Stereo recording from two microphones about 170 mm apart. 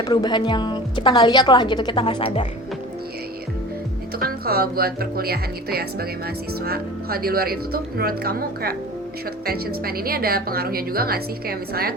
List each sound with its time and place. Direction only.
0.0 s a woman's voice: 25° left (ahead or behind)
4.2 s speech: 60° right (ahead or behind)